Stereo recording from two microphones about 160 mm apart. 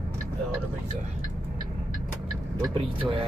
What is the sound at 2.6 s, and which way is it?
Speech, 30° right (ahead or behind).